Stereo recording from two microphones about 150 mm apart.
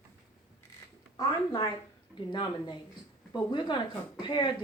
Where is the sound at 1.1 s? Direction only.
25° left (ahead or behind).